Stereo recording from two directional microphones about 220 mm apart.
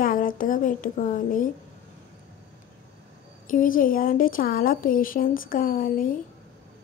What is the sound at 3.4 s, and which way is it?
Speech, 40° left (ahead or behind).